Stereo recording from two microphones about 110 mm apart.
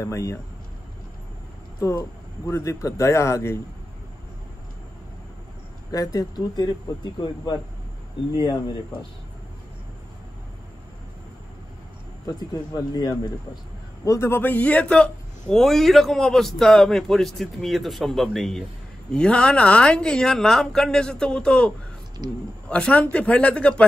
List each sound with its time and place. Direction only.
0.0 s speech: 30° left (ahead or behind)
1.8 s speech: 25° left (ahead or behind)
5.9 s speech: 35° left (ahead or behind)
12.3 s speech: 40° left (ahead or behind)
14.0 s a man's voice: 25° left (ahead or behind); by 23.9 s 10° left (ahead or behind)